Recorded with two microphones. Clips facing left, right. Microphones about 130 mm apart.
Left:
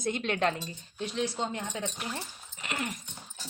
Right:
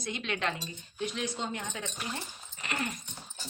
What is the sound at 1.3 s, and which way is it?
Speech, 20° left (ahead or behind).